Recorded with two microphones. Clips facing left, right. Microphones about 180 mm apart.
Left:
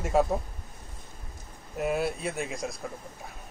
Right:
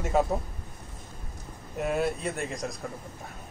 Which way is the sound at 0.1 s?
Centre (ahead or behind).